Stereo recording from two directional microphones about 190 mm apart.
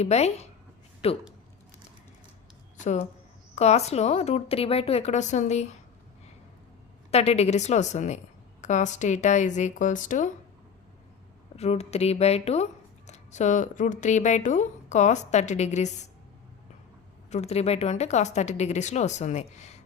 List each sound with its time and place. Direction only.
0.0 s speech: 35° left (ahead or behind)
3.5 s speech: 35° left (ahead or behind)
7.1 s speech: 35° left (ahead or behind)
11.5 s speech: 35° left (ahead or behind)
17.2 s speech: 35° left (ahead or behind)